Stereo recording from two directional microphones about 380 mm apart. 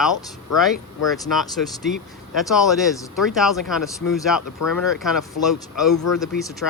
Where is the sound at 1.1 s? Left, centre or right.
Centre.